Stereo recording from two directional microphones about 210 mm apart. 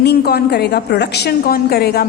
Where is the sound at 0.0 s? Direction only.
50° left (ahead or behind).